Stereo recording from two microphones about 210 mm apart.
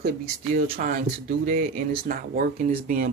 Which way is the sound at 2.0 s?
40° right (ahead or behind).